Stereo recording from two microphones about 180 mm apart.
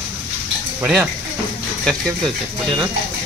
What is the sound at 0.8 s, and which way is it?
Speech, 5° right (ahead or behind).